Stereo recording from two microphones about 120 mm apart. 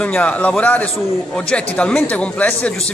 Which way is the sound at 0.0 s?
10° left (ahead or behind).